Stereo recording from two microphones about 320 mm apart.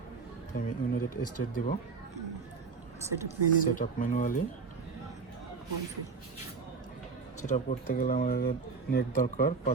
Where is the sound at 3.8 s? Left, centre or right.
Left.